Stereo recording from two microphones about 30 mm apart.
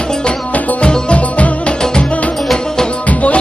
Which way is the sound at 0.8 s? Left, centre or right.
Left.